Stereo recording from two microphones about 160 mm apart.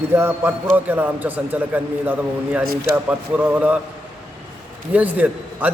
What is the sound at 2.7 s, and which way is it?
Speech, 75° right (ahead or behind).